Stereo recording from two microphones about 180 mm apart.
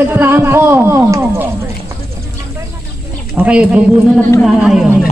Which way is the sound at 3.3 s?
5° right (ahead or behind).